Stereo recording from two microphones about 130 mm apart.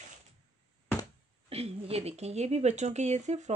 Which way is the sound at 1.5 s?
50° right (ahead or behind).